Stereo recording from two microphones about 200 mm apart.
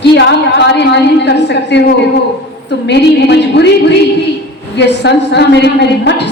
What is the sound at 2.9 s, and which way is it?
A woman's voice, 55° left (ahead or behind).